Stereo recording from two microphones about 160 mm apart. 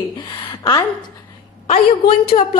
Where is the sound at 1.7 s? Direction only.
35° left (ahead or behind).